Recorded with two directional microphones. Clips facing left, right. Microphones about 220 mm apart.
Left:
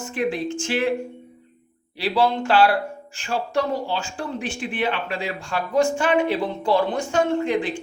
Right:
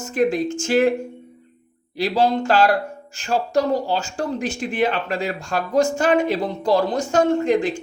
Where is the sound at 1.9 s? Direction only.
40° right (ahead or behind).